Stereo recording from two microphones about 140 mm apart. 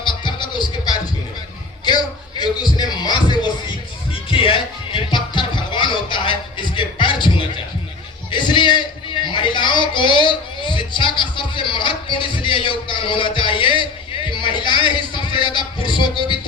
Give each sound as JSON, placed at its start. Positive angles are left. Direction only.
{"t": 0.0, "sound": "music", "side_deg": 35}
{"t": 8.3, "sound": "a sound", "side_deg": 35}
{"t": 14.3, "sound": "music", "side_deg": 35}